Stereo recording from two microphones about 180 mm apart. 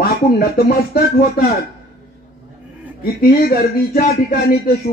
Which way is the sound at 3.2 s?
60° left (ahead or behind).